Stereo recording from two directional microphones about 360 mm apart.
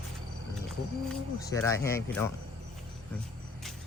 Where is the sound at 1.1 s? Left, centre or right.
Centre.